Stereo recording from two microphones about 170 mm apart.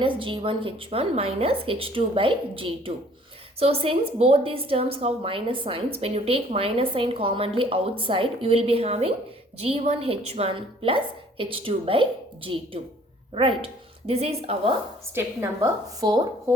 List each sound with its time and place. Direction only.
0.0 s a woman's voice: 30° right (ahead or behind)
15.1 s a woman's voice: 15° right (ahead or behind)